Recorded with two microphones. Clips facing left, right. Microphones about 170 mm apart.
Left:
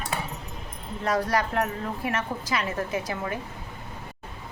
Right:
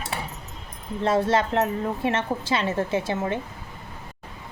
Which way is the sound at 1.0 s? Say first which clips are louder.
Right 4 dB; 25° right (ahead or behind).